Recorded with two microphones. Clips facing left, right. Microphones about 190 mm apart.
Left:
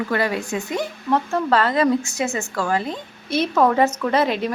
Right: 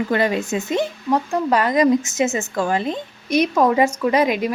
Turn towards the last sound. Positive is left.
turn(degrees=-10)  # may be behind; listen again after turning